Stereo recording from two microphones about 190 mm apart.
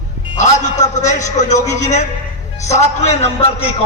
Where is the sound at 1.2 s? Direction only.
40° left (ahead or behind).